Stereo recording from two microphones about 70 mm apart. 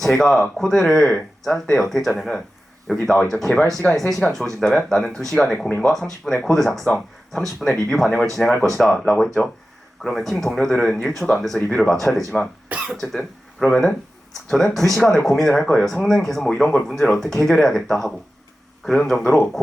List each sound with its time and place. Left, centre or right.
0.0 s speech: centre
12.6 s cough: centre
13.0 s speech: centre
19.1 s speech: centre